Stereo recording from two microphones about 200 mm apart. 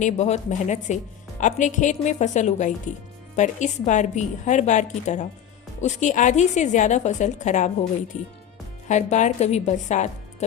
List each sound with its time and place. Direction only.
0.0 s a woman's voice: 35° left (ahead or behind)